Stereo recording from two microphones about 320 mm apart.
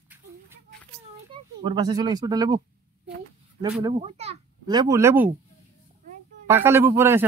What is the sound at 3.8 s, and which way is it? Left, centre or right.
A child's voice, centre.